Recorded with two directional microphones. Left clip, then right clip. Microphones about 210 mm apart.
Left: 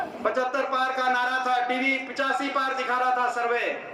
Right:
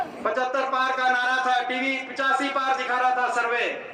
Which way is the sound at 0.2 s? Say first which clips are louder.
Even; 50° left (ahead or behind).